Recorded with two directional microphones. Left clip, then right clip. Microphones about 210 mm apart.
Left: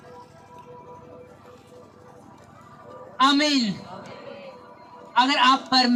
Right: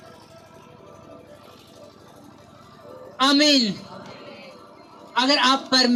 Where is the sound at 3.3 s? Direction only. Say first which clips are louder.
Right 4 dB; 50° right (ahead or behind).